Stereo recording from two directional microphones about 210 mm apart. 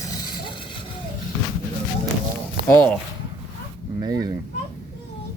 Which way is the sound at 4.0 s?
20° right (ahead or behind).